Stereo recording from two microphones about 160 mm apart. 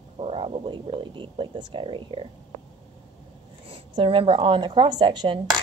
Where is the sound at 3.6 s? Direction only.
35° right (ahead or behind).